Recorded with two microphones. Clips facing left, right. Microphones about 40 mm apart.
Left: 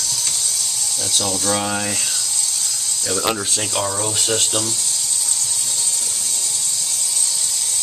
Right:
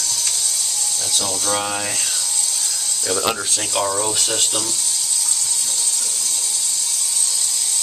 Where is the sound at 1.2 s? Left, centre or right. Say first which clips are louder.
Left 1 dB; centre.